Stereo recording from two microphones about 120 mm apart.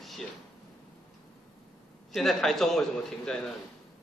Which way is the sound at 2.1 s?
5° left (ahead or behind).